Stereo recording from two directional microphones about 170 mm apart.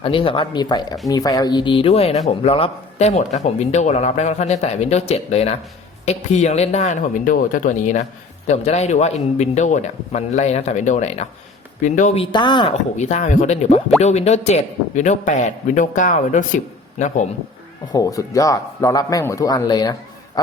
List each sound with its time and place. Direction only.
0.0 s a man's voice: 30° left (ahead or behind)
12.2 s speech: 25° left (ahead or behind)
13.0 s a man's voice: 45° left (ahead or behind)
17.9 s speech: 20° left (ahead or behind)